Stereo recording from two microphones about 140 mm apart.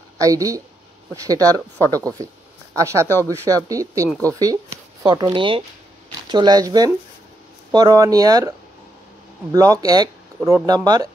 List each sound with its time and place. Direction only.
0.2 s speech: 25° right (ahead or behind)